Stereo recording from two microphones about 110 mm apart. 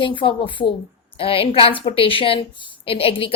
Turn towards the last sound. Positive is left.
turn(degrees=60)  # may be behind; listen again after turning